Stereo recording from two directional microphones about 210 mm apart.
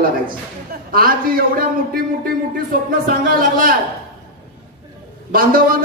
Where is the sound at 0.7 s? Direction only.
45° right (ahead or behind).